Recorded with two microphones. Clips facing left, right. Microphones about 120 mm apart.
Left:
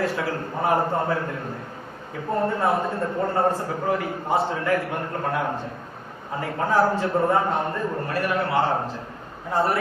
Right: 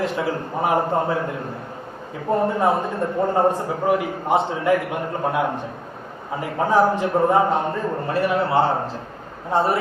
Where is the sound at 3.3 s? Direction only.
15° right (ahead or behind).